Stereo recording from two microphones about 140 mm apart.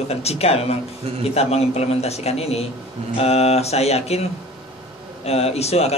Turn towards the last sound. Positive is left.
turn(degrees=50)  # may be behind; listen again after turning